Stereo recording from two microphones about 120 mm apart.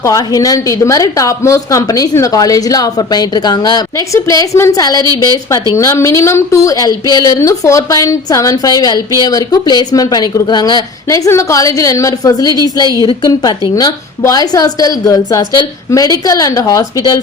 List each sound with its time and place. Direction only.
0.0 s a woman's voice: 30° left (ahead or behind)